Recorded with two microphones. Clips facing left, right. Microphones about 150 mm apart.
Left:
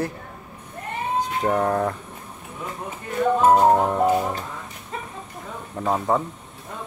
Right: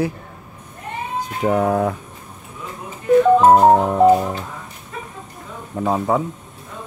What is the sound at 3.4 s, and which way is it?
Music, 45° right (ahead or behind).